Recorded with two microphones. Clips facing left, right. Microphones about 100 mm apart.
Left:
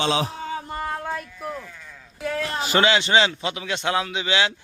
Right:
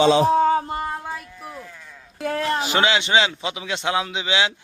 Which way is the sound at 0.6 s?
15° right (ahead or behind).